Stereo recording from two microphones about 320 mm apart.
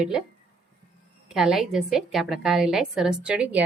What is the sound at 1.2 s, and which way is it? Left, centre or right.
A woman's voice, centre.